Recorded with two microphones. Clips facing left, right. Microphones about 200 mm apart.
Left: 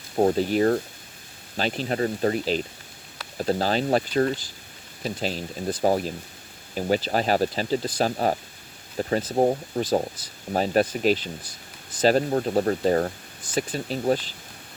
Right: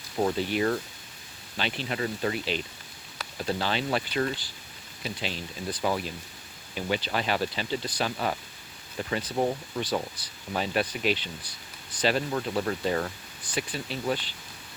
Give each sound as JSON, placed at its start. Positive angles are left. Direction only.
{"t": 0.2, "sound": "speech", "side_deg": 40}